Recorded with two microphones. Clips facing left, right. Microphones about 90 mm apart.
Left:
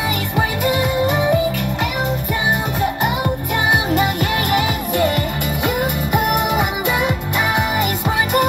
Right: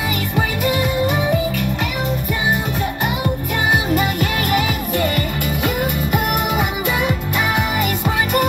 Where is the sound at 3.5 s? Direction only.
20° left (ahead or behind).